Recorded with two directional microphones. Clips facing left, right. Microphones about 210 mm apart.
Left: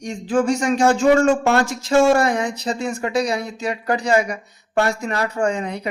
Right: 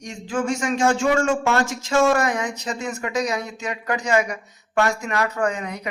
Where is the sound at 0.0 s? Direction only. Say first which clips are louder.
Left 6 dB; 35° left (ahead or behind).